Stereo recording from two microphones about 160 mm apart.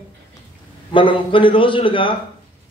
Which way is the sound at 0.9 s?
30° left (ahead or behind).